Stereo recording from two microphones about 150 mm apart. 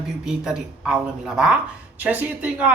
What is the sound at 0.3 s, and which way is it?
Speech, 5° right (ahead or behind).